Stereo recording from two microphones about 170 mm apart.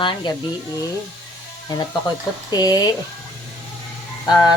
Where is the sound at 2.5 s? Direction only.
20° left (ahead or behind).